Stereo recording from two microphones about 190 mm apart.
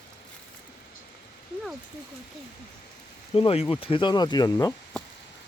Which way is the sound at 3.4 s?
30° left (ahead or behind).